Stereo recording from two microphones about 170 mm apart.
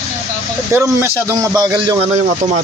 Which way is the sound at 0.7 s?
15° right (ahead or behind).